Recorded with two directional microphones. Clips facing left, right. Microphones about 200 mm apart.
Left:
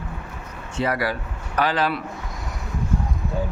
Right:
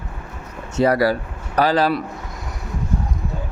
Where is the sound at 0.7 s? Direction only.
40° right (ahead or behind).